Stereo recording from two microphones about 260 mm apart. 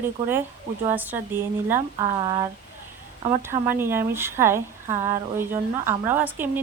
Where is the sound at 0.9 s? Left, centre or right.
Centre.